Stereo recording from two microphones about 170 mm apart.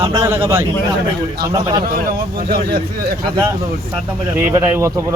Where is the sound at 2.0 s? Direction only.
60° right (ahead or behind).